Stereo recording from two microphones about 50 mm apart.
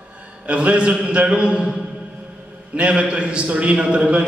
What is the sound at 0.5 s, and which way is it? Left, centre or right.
A man's voice, right.